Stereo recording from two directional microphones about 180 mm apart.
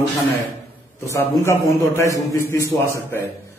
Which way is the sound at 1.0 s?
15° left (ahead or behind).